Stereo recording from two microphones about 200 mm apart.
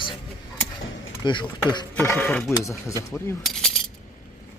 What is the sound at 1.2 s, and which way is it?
Speech, 25° left (ahead or behind).